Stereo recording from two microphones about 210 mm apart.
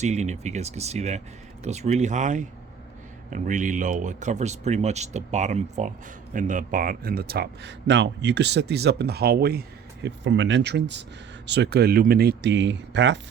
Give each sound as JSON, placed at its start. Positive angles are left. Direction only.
{"t": 0.0, "sound": "speech", "side_deg": -35}